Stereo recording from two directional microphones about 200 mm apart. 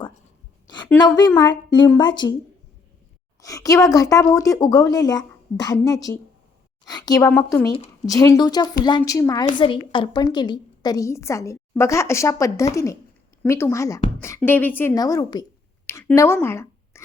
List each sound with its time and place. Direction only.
1.0 s speech: 20° left (ahead or behind)
3.4 s a woman's voice: 15° left (ahead or behind)
15.9 s a sound: 15° left (ahead or behind)